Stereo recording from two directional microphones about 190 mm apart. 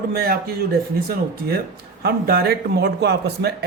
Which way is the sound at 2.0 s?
55° right (ahead or behind).